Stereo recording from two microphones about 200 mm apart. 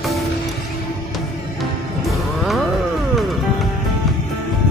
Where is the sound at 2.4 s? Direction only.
Centre (ahead or behind).